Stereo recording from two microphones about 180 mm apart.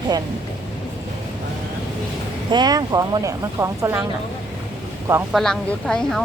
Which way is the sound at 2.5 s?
20° right (ahead or behind).